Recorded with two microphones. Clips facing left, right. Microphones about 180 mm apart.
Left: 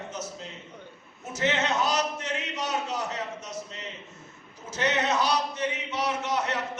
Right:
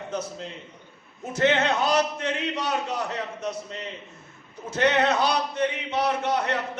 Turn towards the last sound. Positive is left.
turn(degrees=-60)  # may be behind; listen again after turning